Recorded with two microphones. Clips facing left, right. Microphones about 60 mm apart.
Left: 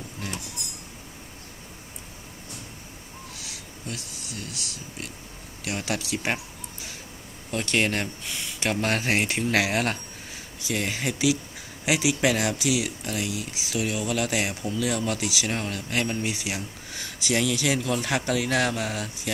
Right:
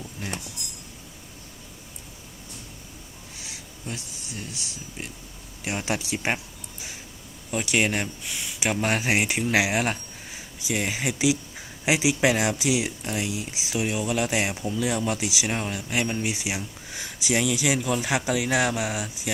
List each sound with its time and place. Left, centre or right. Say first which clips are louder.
0.2 s a sound: right 1 dB; centre
3.4 s speech: right 3 dB; right
7.5 s speech: right 1 dB; centre